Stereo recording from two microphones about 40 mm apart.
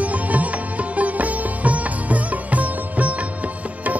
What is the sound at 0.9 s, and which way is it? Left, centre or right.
Music, right.